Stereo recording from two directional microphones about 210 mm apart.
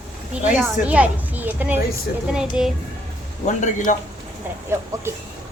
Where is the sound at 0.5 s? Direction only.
5° right (ahead or behind).